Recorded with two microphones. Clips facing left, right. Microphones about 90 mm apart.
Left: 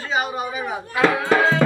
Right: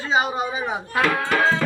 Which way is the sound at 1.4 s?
5° left (ahead or behind).